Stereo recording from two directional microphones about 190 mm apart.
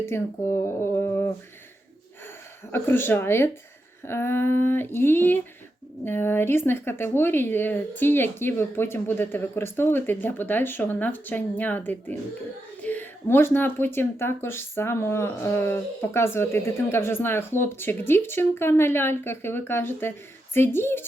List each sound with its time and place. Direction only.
0.5 s speech: 15° left (ahead or behind)
2.7 s speech: 10° left (ahead or behind)